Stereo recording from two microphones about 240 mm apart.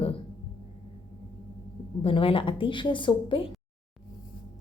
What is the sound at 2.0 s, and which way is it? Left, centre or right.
A woman's voice, left.